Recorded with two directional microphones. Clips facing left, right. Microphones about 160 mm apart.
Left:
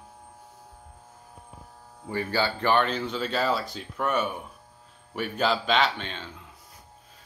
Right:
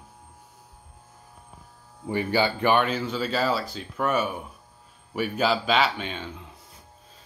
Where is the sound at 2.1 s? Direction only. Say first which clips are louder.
Right 3 dB; 15° right (ahead or behind).